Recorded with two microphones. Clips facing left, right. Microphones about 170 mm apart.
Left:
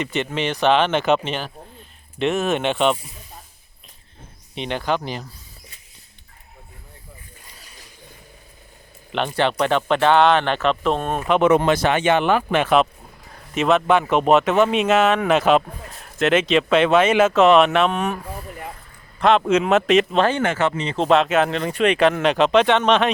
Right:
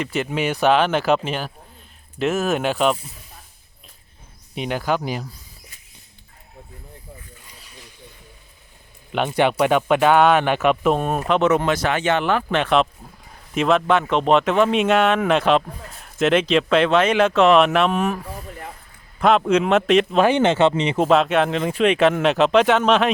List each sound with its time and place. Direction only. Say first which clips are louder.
0.0 s speech: right 1 dB; centre (ahead or behind)
4.5 s speech: right 1 dB; 5° right (ahead or behind)
9.1 s speech: right 2 dB; 10° right (ahead or behind)
11.3 s speech: left 2 dB; 10° left (ahead or behind)
11.5 s speech: left 3 dB; 25° left (ahead or behind); by 18.2 s centre (ahead or behind)
19.2 s speech: even; centre (ahead or behind)
20.2 s speech: right 4 dB; 20° right (ahead or behind)
20.9 s speech: even; 5° right (ahead or behind)